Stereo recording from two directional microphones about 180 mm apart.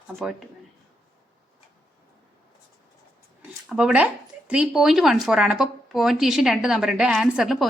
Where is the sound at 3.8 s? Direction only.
5° right (ahead or behind).